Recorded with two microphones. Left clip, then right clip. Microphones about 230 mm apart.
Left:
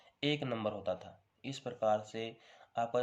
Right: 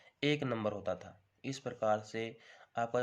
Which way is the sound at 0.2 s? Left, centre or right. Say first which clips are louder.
Right 1 dB; right.